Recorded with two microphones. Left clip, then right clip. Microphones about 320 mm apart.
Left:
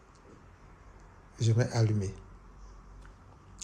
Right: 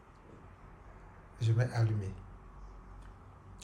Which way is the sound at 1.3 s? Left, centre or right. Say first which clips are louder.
Left 5 dB; centre.